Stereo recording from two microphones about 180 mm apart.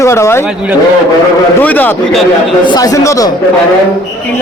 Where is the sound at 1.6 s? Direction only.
10° left (ahead or behind).